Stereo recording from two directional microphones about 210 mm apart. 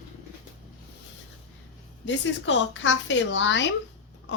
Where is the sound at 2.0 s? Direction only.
60° left (ahead or behind).